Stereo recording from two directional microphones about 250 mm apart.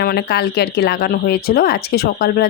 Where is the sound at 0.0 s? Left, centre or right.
Left.